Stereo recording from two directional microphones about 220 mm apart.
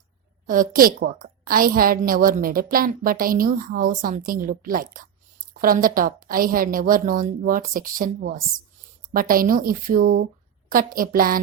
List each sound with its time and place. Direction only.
0.4 s a woman's voice: 40° right (ahead or behind)